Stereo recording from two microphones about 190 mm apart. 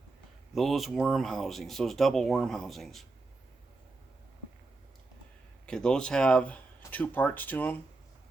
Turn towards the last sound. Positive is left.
turn(degrees=10)  # may be behind; listen again after turning